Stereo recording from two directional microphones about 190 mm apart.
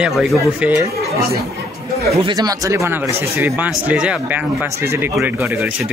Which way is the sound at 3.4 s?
10° right (ahead or behind).